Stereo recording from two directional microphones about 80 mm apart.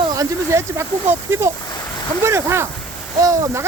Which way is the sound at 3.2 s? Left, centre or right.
Right.